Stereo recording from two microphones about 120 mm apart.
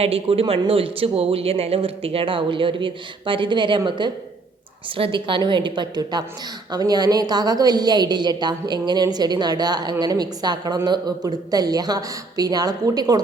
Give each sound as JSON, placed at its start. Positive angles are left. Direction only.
{"t": 0.0, "sound": "a woman's voice", "side_deg": -55}